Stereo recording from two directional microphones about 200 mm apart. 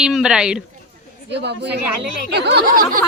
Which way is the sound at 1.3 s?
60° right (ahead or behind).